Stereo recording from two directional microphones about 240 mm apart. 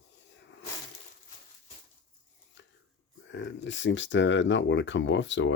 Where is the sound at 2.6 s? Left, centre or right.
Left.